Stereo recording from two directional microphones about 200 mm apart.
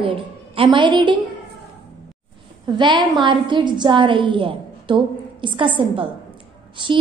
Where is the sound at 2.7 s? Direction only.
25° right (ahead or behind).